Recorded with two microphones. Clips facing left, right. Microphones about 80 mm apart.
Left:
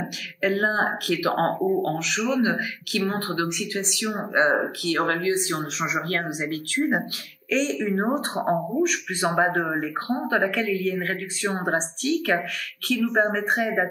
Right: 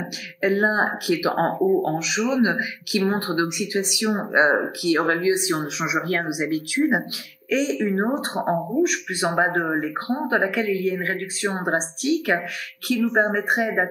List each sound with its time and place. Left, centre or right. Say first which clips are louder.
0.4 s a woman's voice: right 2 dB; centre